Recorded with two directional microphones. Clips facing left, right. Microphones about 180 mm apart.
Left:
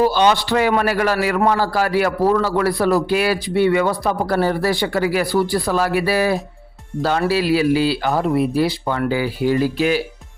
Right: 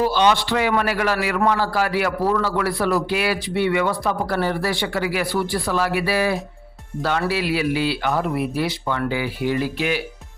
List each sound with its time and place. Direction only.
0.0 s a man's voice: 45° left (ahead or behind)